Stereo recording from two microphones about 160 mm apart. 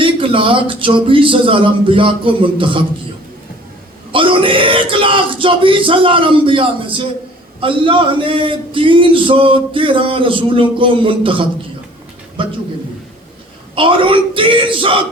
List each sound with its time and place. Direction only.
0.0 s speech: 35° right (ahead or behind)
4.1 s speech: 35° right (ahead or behind)
13.7 s speech: 30° right (ahead or behind)